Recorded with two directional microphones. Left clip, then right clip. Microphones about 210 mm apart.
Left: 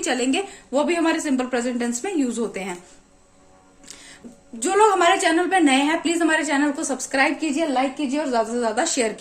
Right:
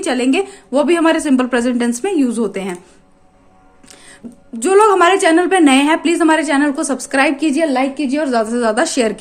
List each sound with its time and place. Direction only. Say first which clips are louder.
0.0 s a woman's voice: right 6 dB; 20° right (ahead or behind)
3.8 s a sound: right 2 dB; 15° right (ahead or behind)
4.6 s a woman's voice: right 6 dB; 30° right (ahead or behind)